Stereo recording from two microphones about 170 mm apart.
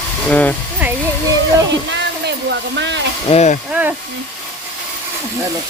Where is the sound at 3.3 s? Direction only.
40° left (ahead or behind).